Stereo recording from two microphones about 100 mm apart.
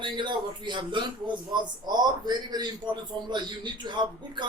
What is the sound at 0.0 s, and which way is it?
A man's voice, 50° right (ahead or behind).